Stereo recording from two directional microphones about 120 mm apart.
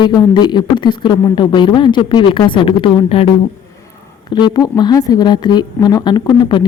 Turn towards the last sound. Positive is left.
turn(degrees=40)  # may be behind; listen again after turning